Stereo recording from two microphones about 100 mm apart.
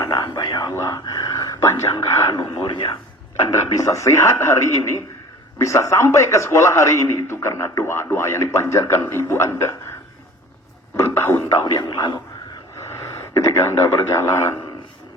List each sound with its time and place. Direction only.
0.7 s a sound: 30° left (ahead or behind)
3.4 s a man's voice: 30° left (ahead or behind)
10.9 s a man's voice: 25° left (ahead or behind)
11.6 s speech: 50° left (ahead or behind)
13.1 s a man's voice: 30° left (ahead or behind)